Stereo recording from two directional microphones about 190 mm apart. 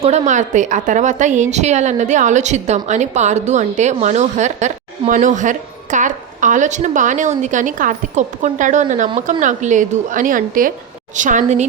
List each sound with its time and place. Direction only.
0.0 s a woman's voice: 40° right (ahead or behind)